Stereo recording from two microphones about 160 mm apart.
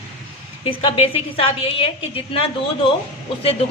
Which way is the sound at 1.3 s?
35° left (ahead or behind).